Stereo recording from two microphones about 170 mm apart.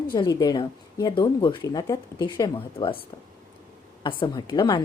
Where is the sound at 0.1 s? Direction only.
25° left (ahead or behind).